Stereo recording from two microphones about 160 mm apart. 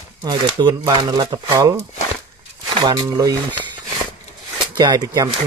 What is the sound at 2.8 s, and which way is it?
Speech, 20° right (ahead or behind).